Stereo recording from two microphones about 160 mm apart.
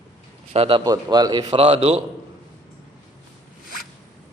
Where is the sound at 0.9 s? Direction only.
25° right (ahead or behind).